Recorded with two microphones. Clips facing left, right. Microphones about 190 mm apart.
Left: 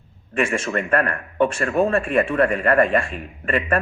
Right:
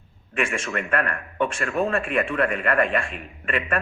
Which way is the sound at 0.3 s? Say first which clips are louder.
Left 4 dB; 35° left (ahead or behind).